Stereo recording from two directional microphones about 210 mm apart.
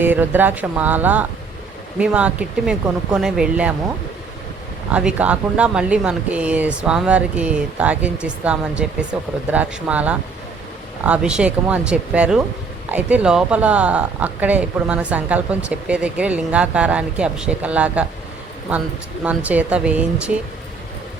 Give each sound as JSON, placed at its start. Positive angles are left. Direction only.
{"t": 0.0, "sound": "speech", "side_deg": -10}
{"t": 4.9, "sound": "speech", "side_deg": -5}
{"t": 19.2, "sound": "speech", "side_deg": -5}